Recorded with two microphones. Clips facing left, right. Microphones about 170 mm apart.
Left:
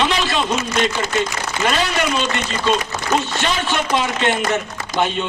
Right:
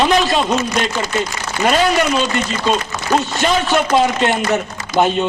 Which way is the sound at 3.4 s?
45° right (ahead or behind).